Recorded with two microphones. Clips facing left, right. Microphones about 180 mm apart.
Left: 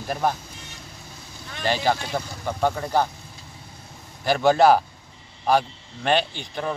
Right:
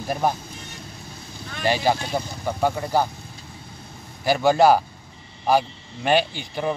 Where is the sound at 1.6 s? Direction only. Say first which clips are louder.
Right 2 dB; 10° right (ahead or behind).